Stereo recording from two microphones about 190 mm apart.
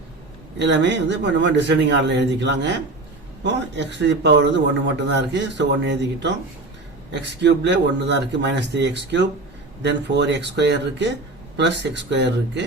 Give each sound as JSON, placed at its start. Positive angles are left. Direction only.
{"t": 0.7, "sound": "speech", "side_deg": -65}